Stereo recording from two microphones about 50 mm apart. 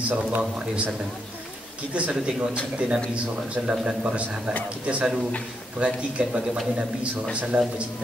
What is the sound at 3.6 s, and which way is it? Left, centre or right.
A man's voice, right.